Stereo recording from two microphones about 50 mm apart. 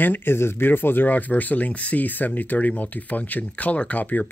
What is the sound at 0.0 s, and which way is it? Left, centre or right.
Speech, left.